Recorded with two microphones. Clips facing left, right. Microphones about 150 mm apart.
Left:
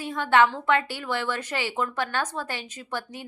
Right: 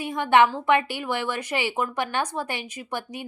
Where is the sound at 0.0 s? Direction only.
15° right (ahead or behind).